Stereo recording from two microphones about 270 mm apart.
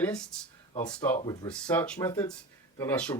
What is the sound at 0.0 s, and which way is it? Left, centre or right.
Speech, centre.